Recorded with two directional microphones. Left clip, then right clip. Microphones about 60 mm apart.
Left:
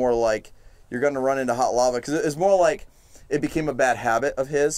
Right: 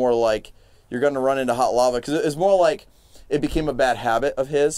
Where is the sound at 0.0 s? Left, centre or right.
Right.